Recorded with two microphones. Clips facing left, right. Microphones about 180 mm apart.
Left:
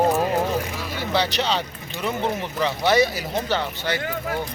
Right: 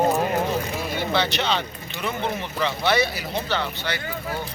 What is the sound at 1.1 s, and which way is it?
Speech, 35° left (ahead or behind).